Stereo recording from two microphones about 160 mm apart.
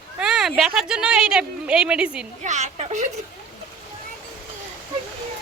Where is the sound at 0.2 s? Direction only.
5° right (ahead or behind).